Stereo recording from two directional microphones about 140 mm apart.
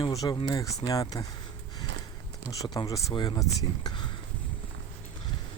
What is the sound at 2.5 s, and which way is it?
Speech, 25° left (ahead or behind).